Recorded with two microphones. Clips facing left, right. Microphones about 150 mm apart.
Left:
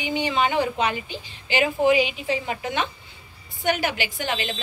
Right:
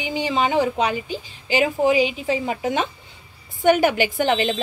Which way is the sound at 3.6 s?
45° right (ahead or behind).